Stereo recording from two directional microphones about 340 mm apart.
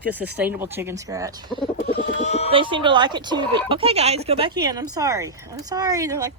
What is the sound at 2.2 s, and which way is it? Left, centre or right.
Speech, centre.